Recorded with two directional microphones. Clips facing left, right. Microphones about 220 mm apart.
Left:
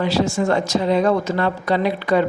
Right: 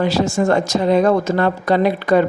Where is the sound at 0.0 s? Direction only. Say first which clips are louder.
Right 2 dB; 45° right (ahead or behind).